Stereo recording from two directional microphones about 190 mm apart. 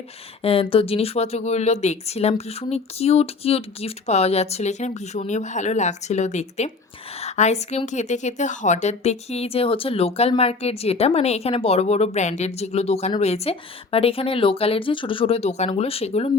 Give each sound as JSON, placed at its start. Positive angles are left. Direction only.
{"t": 0.4, "sound": "a woman's voice", "side_deg": 30}